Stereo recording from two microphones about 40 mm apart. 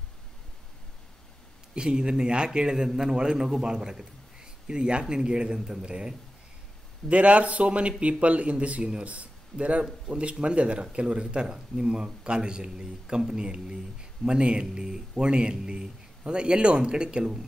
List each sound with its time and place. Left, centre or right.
1.8 s a man's voice: right
7.1 s a man's voice: right